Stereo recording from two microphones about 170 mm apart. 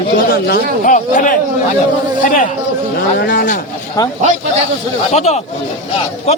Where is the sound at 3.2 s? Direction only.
60° left (ahead or behind).